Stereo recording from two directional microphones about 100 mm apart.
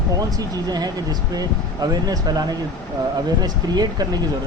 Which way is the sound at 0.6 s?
40° right (ahead or behind).